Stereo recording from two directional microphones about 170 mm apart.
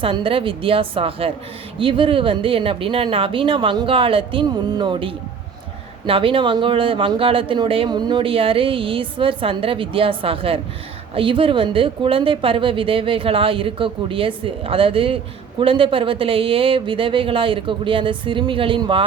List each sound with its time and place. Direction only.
0.0 s a woman's voice: 30° right (ahead or behind)